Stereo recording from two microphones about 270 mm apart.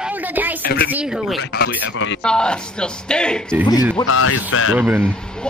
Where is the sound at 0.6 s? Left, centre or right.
Left.